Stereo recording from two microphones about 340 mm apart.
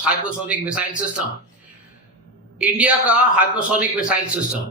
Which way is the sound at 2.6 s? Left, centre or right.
Centre.